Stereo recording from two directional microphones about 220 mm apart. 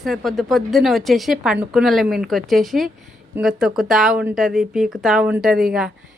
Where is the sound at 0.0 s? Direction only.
Centre (ahead or behind).